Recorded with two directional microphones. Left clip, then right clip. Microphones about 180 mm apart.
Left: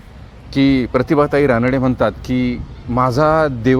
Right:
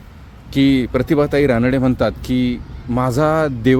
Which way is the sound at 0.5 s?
15° right (ahead or behind).